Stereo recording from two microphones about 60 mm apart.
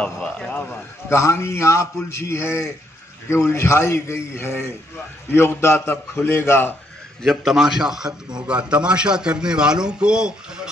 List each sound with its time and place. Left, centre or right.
0.0 s speech: centre
1.0 s a man's voice: left
7.2 s a man's voice: centre